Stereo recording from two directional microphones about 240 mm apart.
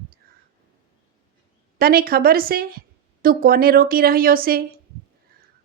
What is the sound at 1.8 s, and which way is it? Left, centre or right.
Speech, right.